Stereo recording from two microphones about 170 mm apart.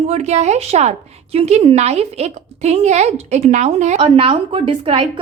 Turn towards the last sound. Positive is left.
turn(degrees=-30)  # may be behind; listen again after turning